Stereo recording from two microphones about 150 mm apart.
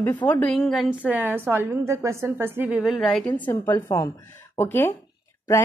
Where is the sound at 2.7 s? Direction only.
Centre (ahead or behind).